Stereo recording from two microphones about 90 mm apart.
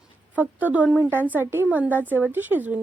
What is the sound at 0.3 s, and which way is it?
A woman's voice, 15° right (ahead or behind).